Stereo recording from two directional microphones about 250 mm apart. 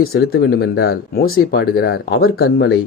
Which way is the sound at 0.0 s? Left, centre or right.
Left.